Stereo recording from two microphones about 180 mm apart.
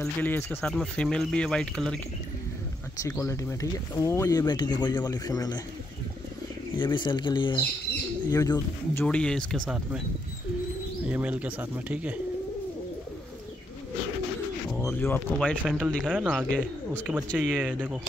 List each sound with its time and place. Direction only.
0.0 s speech: 10° left (ahead or behind)
3.0 s speech: 20° left (ahead or behind)
6.8 s speech: 25° left (ahead or behind); by 10.0 s centre (ahead or behind)
11.1 s speech: 5° right (ahead or behind)
14.9 s speech: 10° left (ahead or behind); by 17.9 s 10° right (ahead or behind)